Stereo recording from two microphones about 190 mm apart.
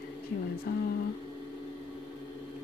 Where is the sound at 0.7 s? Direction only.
50° left (ahead or behind).